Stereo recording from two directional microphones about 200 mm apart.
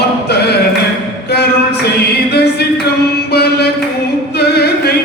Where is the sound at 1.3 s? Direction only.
55° left (ahead or behind).